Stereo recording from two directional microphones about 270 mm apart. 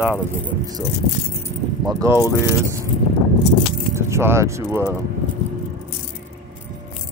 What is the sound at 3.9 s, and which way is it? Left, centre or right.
Speech, centre.